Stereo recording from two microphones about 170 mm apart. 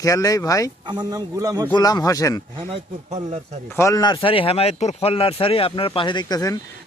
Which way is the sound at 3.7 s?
15° left (ahead or behind).